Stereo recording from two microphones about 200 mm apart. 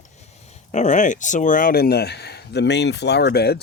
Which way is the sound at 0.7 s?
35° left (ahead or behind).